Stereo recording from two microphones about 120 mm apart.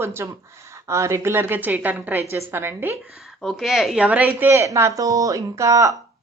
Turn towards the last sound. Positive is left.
turn(degrees=-25)  # may be behind; listen again after turning